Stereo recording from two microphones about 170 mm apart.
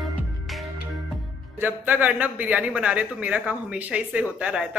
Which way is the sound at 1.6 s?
10° right (ahead or behind).